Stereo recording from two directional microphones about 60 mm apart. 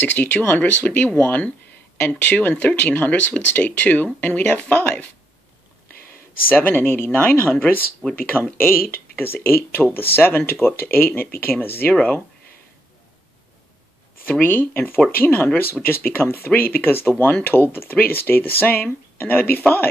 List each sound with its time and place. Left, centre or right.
0.0 s speech: left
6.5 s speech: left
11.9 s speech: left
14.4 s speech: left
15.6 s speech: left